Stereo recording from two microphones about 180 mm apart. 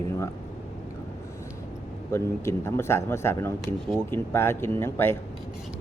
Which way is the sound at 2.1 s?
15° left (ahead or behind).